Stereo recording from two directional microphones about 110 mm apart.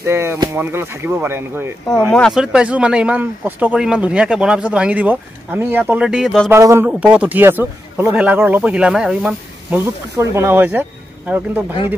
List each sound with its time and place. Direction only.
0.0 s speech: 25° right (ahead or behind)
2.0 s speech: 5° left (ahead or behind)
2.3 s speech: 5° right (ahead or behind)
6.0 s speech: 5° right (ahead or behind)
6.5 s speech: 25° right (ahead or behind)
6.9 s speech: 10° right (ahead or behind)
9.7 s speech: 20° right (ahead or behind)